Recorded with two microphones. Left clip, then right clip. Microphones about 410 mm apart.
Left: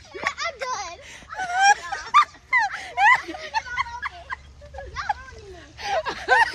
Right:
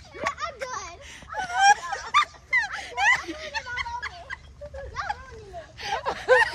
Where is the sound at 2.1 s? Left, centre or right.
Centre.